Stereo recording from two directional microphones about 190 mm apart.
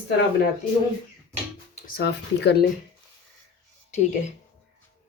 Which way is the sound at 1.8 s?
55° left (ahead or behind).